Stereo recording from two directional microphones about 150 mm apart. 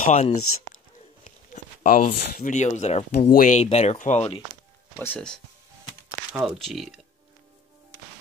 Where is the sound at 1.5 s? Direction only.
65° left (ahead or behind); by 4.4 s 40° left (ahead or behind).